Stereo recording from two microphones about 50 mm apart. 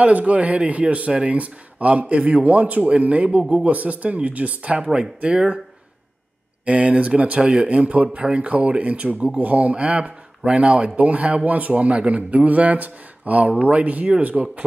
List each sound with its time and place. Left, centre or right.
0.0 s speech: right
6.6 s speech: right